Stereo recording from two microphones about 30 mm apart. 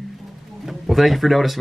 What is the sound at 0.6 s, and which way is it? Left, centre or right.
Speech, centre.